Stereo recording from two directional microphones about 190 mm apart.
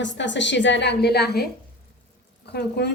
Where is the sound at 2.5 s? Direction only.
60° left (ahead or behind).